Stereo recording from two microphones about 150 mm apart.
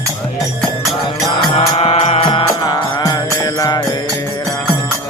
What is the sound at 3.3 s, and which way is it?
Mantra, 25° left (ahead or behind).